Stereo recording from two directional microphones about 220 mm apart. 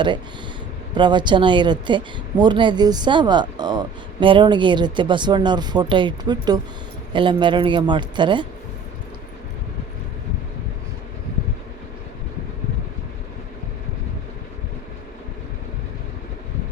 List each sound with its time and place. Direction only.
0.9 s speech: 20° right (ahead or behind)